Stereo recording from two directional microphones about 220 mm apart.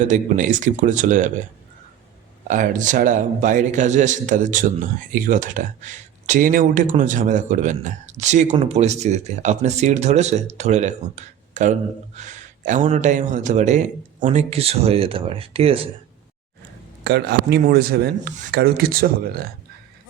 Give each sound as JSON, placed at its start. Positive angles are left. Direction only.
{"t": 0.0, "sound": "speech", "side_deg": -35}
{"t": 2.5, "sound": "speech", "side_deg": -35}
{"t": 17.0, "sound": "speech", "side_deg": -45}